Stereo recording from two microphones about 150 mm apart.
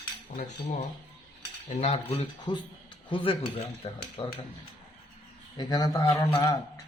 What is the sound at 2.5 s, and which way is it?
Speech, 35° left (ahead or behind).